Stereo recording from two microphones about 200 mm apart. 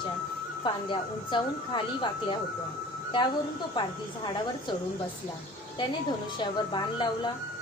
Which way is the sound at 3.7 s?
25° left (ahead or behind).